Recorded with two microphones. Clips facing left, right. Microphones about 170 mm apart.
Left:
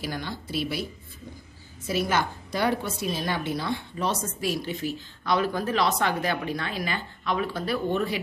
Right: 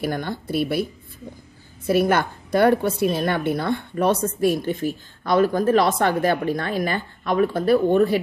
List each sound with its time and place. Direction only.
0.0 s a woman's voice: 55° right (ahead or behind)
1.9 s a woman's voice: 55° right (ahead or behind)